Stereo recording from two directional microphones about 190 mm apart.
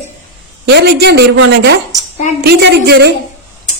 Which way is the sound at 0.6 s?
60° right (ahead or behind).